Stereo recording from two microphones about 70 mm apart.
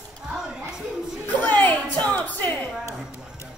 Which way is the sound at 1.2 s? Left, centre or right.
Left.